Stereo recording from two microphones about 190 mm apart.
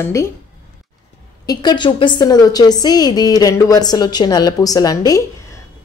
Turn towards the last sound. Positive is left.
turn(degrees=20)  # may be behind; listen again after turning